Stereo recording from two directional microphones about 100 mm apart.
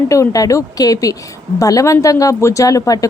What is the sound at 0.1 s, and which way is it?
Speech, 35° left (ahead or behind).